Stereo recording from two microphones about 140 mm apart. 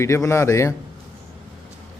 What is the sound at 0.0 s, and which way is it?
Speech, 20° left (ahead or behind).